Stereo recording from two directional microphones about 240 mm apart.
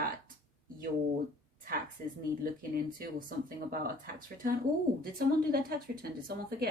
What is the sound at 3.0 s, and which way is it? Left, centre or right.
Speech, right.